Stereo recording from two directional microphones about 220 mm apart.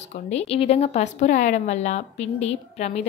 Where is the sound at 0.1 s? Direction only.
30° left (ahead or behind).